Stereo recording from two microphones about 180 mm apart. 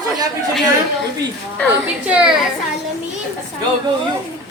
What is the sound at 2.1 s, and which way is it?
Speech, 5° right (ahead or behind).